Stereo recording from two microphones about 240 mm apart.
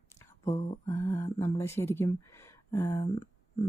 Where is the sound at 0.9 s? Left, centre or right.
Centre.